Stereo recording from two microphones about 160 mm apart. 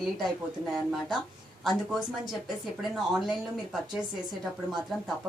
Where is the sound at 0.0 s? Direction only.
Centre (ahead or behind).